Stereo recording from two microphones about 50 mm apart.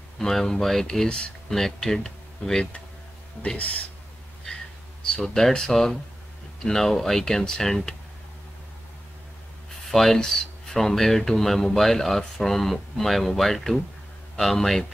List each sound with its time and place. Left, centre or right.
0.2 s speech: centre
1.0 s speech: centre
1.5 s speech: centre
3.5 s speech: left
5.0 s speech: centre
9.8 s speech: centre